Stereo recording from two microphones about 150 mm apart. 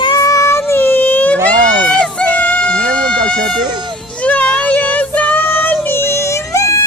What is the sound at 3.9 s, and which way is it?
Child singing, 10° left (ahead or behind).